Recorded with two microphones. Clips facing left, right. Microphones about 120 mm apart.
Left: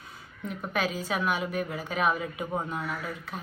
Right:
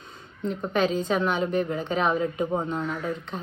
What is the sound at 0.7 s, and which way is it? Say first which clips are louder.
A woman's voice: right 6 dB; 5° left (ahead or behind).